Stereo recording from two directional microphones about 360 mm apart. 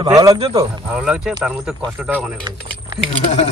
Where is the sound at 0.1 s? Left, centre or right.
Centre.